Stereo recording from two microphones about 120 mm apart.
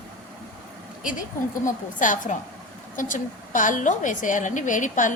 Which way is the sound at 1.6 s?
90° left.